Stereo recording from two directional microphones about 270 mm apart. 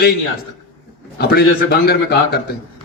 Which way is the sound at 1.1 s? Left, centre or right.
Left.